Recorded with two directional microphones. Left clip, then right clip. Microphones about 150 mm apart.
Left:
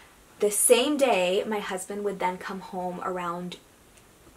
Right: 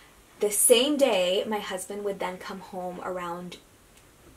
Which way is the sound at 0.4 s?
35° left (ahead or behind).